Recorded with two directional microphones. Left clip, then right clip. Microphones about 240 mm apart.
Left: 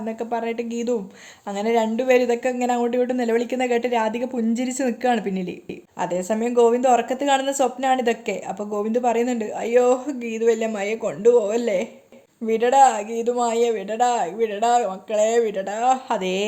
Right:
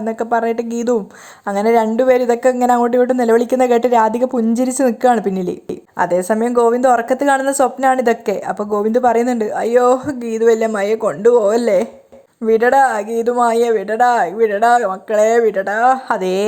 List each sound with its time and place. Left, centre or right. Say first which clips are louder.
0.2 s a woman's voice: right 9 dB; right
13.0 s speech: right 7 dB; right
13.2 s a woman's voice: right 6 dB; centre